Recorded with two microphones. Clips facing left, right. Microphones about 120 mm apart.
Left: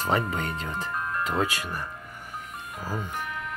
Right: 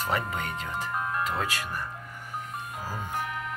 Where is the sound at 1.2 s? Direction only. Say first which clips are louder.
Left 3 dB; 20° left (ahead or behind).